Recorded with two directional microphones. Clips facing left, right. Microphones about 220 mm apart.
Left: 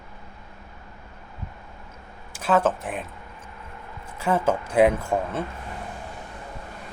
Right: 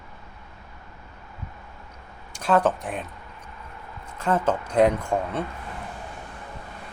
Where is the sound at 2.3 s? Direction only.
5° left (ahead or behind).